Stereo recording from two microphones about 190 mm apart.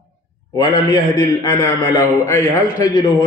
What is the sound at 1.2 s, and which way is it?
A man's voice, 20° left (ahead or behind).